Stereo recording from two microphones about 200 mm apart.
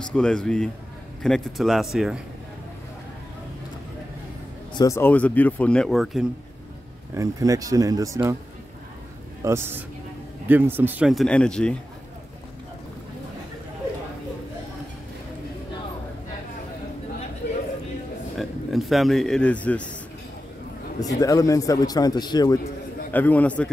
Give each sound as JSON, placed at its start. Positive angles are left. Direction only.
{"t": 0.0, "sound": "speech", "side_deg": 5}
{"t": 4.7, "sound": "speech", "side_deg": 15}
{"t": 7.2, "sound": "speech", "side_deg": -15}
{"t": 9.4, "sound": "speech", "side_deg": -10}
{"t": 18.4, "sound": "speech", "side_deg": 0}
{"t": 21.2, "sound": "speech", "side_deg": 15}
{"t": 23.1, "sound": "speech", "side_deg": 10}